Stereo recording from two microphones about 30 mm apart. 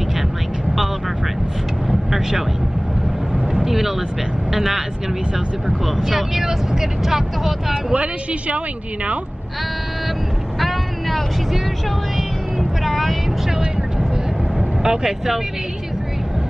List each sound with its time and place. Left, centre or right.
1.9 s vehicle: centre
3.6 s speech: centre
6.0 s speech: centre
7.9 s speech: right
10.6 s vehicle: centre
12.9 s speech: centre
14.8 s speech: right